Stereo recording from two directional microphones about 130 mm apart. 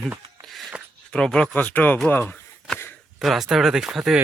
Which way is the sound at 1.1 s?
5° left (ahead or behind).